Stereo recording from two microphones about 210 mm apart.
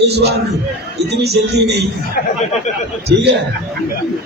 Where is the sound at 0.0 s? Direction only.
55° right (ahead or behind).